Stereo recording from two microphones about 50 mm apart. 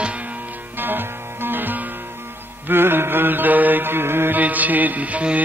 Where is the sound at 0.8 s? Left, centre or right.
Right.